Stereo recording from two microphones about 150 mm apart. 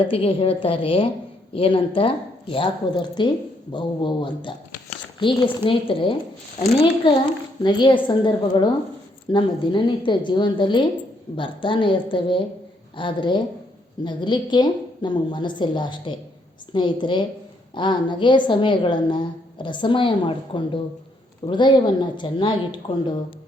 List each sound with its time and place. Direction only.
0.0 s a woman's voice: 35° left (ahead or behind)
13.0 s a woman's voice: 35° left (ahead or behind)